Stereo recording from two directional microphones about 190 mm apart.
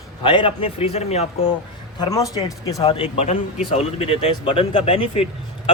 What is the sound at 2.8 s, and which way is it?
Speech, 30° left (ahead or behind).